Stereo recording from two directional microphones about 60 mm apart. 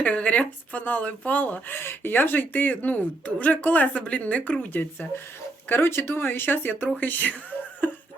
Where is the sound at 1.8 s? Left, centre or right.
Left.